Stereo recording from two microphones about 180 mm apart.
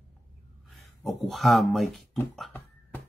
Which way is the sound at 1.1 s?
Centre (ahead or behind).